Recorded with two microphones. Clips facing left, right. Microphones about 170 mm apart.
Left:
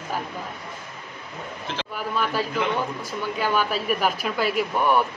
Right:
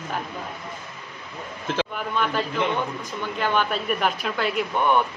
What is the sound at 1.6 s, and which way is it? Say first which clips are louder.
Speech: right 8 dB; 50° right (ahead or behind).